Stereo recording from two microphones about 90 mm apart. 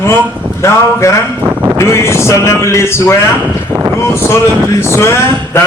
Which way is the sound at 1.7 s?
30° left (ahead or behind).